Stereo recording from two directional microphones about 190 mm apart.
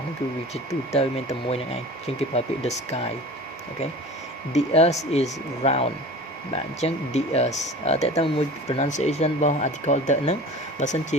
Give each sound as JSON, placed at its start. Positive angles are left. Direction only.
{"t": 0.5, "sound": "speech", "side_deg": 35}
{"t": 4.5, "sound": "speech", "side_deg": 35}